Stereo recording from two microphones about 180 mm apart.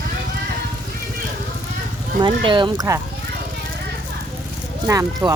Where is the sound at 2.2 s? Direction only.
25° right (ahead or behind).